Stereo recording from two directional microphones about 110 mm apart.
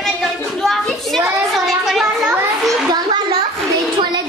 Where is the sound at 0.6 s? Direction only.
Centre (ahead or behind).